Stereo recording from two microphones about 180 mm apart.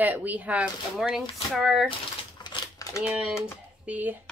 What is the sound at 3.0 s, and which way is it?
Speech, 5° right (ahead or behind).